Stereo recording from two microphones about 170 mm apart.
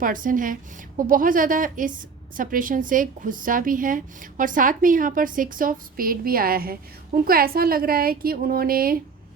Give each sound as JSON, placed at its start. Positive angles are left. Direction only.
{"t": 0.0, "sound": "a woman's voice", "side_deg": -50}